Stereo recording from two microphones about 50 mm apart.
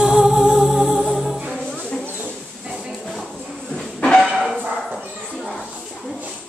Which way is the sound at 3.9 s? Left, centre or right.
Centre.